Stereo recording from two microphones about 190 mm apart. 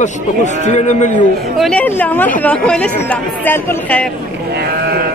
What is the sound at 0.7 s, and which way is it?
Speech, 40° left (ahead or behind).